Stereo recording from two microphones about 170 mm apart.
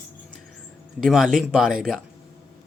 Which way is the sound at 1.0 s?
Centre (ahead or behind).